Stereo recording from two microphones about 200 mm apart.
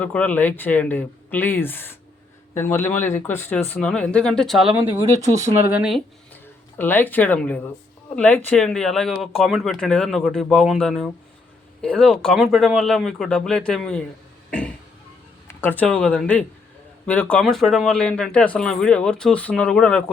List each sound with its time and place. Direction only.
0.0 s speech: 5° left (ahead or behind)
5.2 s speech: 15° right (ahead or behind)
6.3 s speech: 10° left (ahead or behind)
15.4 s speech: 10° left (ahead or behind)